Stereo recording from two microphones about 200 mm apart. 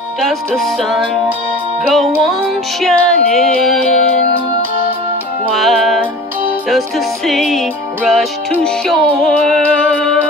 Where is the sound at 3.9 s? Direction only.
35° left (ahead or behind).